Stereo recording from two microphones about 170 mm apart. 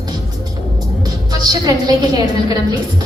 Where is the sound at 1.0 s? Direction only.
20° right (ahead or behind).